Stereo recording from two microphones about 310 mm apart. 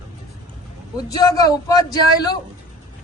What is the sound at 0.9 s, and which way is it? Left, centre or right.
A man's voice, centre.